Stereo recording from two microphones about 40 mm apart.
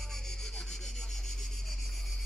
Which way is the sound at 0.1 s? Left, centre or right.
Centre.